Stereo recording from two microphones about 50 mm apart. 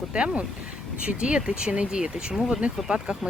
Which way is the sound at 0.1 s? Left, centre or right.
Right.